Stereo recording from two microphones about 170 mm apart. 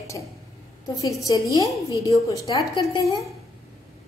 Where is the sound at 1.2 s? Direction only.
20° left (ahead or behind).